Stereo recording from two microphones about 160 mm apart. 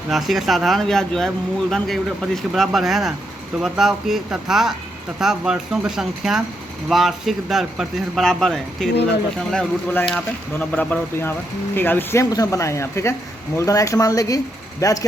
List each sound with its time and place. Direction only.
0.1 s speech: centre (ahead or behind); by 15.0 s 20° left (ahead or behind)